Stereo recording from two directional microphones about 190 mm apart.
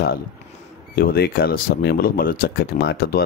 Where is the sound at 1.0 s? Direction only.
55° left (ahead or behind).